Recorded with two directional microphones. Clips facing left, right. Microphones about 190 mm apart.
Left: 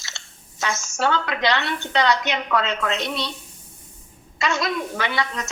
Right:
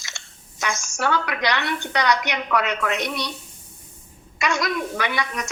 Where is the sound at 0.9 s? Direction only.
25° left (ahead or behind).